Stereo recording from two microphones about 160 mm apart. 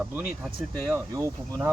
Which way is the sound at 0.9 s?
20° right (ahead or behind).